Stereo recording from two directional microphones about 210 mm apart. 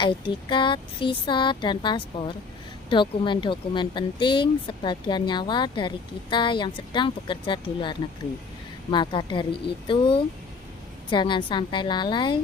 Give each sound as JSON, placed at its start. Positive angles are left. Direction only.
{"t": 0.0, "sound": "speech", "side_deg": 20}